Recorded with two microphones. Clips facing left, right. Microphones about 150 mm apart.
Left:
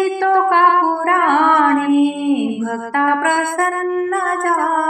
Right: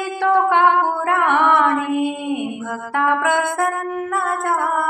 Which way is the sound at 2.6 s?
55° left (ahead or behind).